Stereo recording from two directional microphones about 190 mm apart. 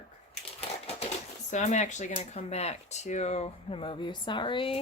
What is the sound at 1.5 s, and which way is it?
Speech, 40° left (ahead or behind).